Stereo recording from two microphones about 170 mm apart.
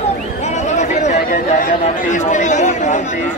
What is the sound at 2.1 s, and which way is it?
Speech, 45° left (ahead or behind).